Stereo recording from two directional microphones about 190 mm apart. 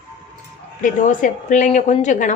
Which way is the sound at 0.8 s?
40° left (ahead or behind).